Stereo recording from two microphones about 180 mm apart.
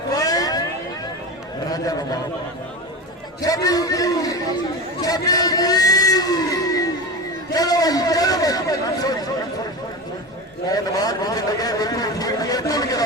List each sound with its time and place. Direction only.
0.2 s a sound: 20° left (ahead or behind)
1.7 s a man's voice: 20° left (ahead or behind)
3.4 s a man's voice: 20° left (ahead or behind)
10.7 s a man's voice: 20° left (ahead or behind)